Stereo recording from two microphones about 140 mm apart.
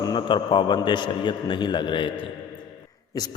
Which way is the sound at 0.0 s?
30° left (ahead or behind).